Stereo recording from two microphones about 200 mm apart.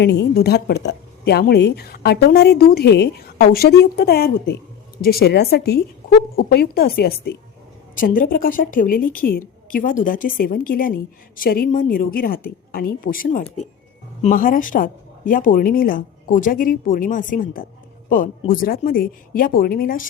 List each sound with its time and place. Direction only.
0.0 s a woman's voice: 60° left (ahead or behind)